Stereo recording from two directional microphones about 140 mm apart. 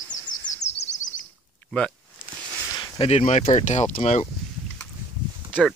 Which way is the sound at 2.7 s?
35° left (ahead or behind).